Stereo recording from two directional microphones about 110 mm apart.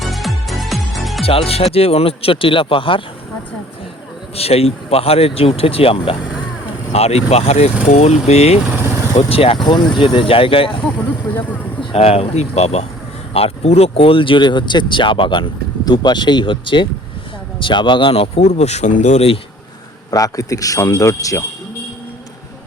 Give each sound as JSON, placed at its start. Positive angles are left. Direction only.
{"t": 0.0, "sound": "music", "side_deg": 0}
{"t": 1.2, "sound": "speech", "side_deg": 60}
{"t": 4.4, "sound": "speech", "side_deg": 65}
{"t": 6.9, "sound": "speech", "side_deg": 70}
{"t": 7.9, "sound": "speech", "side_deg": 90}
{"t": 8.7, "sound": "vehicle", "side_deg": -25}
{"t": 9.1, "sound": "speech", "side_deg": 60}
{"t": 10.0, "sound": "speech", "side_deg": 50}
{"t": 11.8, "sound": "speech", "side_deg": 55}
{"t": 20.1, "sound": "a man's voice", "side_deg": 35}